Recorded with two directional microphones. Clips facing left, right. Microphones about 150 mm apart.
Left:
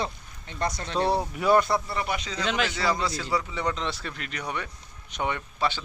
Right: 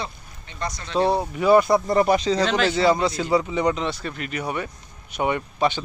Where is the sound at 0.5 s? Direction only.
55° left (ahead or behind).